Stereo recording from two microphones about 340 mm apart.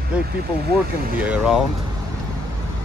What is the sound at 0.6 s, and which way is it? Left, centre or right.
Speech, right.